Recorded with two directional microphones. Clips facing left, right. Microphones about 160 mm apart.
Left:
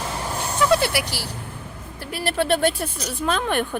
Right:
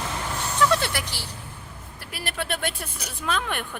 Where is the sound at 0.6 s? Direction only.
10° left (ahead or behind).